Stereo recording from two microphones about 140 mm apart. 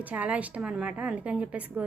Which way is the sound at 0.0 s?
10° right (ahead or behind).